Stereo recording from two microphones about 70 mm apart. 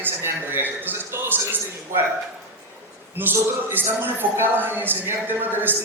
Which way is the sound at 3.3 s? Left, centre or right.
Right.